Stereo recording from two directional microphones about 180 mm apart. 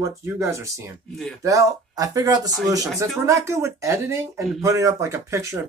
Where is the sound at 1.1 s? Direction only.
Centre (ahead or behind).